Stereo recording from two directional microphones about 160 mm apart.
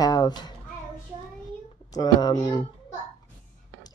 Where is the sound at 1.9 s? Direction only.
25° left (ahead or behind).